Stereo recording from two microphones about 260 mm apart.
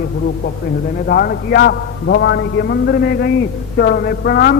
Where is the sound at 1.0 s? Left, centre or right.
Left.